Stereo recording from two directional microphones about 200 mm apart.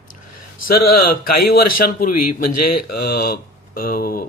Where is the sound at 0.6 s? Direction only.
50° left (ahead or behind).